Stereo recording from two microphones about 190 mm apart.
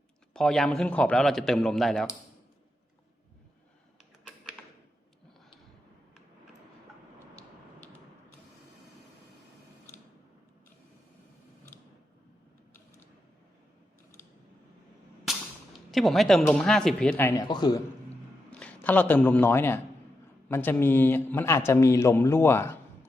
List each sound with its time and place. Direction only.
0.3 s a man's voice: centre (ahead or behind)
4.2 s a sound: centre (ahead or behind)
15.3 s a sound: centre (ahead or behind)
15.9 s a man's voice: centre (ahead or behind)
17.5 s a man's voice: 20° left (ahead or behind)
18.5 s a man's voice: 10° left (ahead or behind)